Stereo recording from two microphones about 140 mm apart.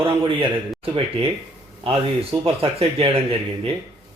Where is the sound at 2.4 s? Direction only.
40° right (ahead or behind).